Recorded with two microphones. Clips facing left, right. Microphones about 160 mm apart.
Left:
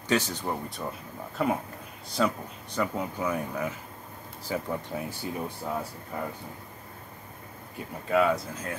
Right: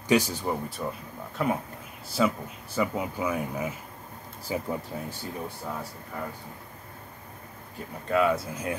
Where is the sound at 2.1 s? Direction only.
5° right (ahead or behind).